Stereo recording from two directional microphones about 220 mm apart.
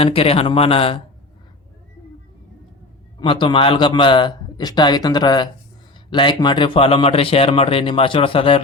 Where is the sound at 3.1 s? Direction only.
20° left (ahead or behind).